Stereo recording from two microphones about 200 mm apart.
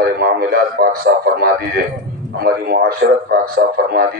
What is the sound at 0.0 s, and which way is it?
A man's voice, 50° right (ahead or behind).